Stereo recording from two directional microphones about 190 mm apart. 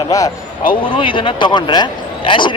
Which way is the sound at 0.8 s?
25° left (ahead or behind).